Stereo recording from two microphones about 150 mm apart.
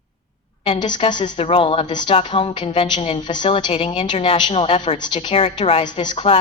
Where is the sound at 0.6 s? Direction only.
35° left (ahead or behind).